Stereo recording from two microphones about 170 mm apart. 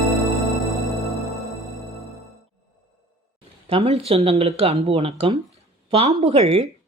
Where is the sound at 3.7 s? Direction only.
35° right (ahead or behind).